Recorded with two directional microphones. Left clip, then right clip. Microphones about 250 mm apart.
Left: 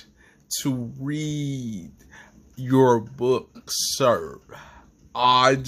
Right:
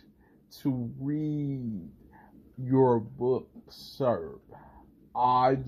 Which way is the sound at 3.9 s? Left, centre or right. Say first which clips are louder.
Left 7 dB; left.